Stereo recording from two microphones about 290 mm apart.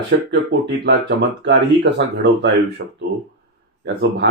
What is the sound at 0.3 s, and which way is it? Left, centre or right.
Speech, right.